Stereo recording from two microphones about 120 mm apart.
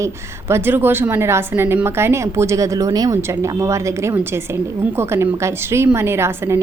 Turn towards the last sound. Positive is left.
turn(degrees=-20)  # may be behind; listen again after turning